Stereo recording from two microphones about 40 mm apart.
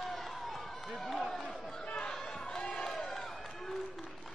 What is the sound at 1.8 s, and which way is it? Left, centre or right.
Basketball bounce, left.